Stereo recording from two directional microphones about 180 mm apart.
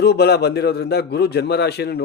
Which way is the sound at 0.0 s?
65° left (ahead or behind).